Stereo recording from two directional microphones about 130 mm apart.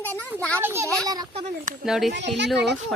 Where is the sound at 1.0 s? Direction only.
30° right (ahead or behind).